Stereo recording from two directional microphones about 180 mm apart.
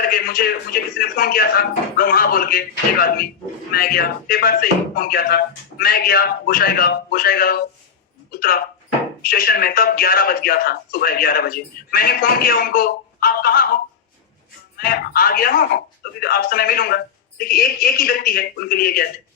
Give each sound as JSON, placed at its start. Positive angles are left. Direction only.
{"t": 0.0, "sound": "speech", "side_deg": 55}
{"t": 14.8, "sound": "speech", "side_deg": 55}